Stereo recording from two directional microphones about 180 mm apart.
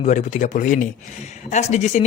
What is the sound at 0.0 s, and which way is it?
Speech, 40° left (ahead or behind).